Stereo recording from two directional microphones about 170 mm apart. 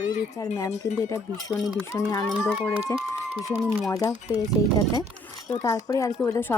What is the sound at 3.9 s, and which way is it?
Speech, 20° left (ahead or behind).